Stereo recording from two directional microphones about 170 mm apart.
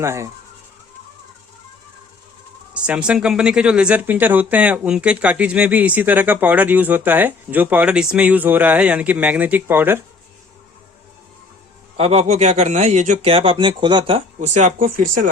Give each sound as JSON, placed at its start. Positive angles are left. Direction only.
{"t": 0.0, "sound": "speech", "side_deg": -15}
{"t": 2.7, "sound": "speech", "side_deg": -5}
{"t": 11.9, "sound": "speech", "side_deg": -40}
{"t": 14.4, "sound": "speech", "side_deg": -45}